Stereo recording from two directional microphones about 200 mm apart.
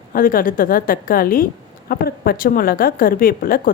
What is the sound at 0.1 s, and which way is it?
A woman's voice, 45° left (ahead or behind).